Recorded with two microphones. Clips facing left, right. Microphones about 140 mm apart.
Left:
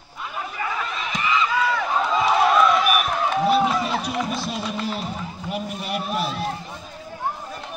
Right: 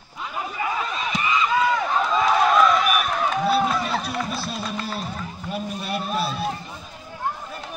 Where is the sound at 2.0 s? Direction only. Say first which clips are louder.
Left 1 dB; 10° left (ahead or behind).